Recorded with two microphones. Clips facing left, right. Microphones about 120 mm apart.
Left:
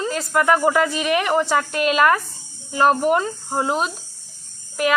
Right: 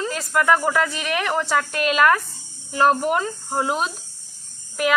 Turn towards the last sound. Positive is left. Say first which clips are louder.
# left 1 dB
turn(degrees=-5)  # may be behind; listen again after turning